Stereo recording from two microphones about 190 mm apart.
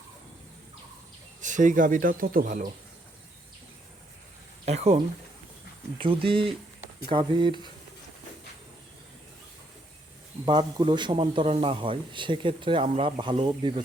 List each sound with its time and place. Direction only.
1.4 s speech: 40° right (ahead or behind)
4.6 s speech: 35° right (ahead or behind)
6.2 s a man's voice: 30° right (ahead or behind)
10.4 s a man's voice: 25° right (ahead or behind)